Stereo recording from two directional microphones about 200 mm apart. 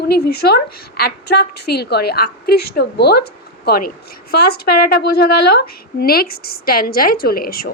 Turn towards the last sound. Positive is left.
turn(degrees=50)  # may be behind; listen again after turning